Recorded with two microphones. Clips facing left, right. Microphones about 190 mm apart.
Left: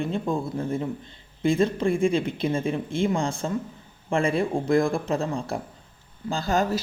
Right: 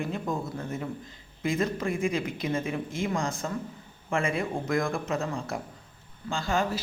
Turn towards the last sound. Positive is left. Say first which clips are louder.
# left 4 dB
turn(degrees=40)  # may be behind; listen again after turning